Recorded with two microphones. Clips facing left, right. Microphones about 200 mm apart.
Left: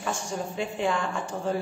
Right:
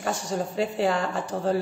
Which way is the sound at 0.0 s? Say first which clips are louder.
Right 3 dB; 40° right (ahead or behind).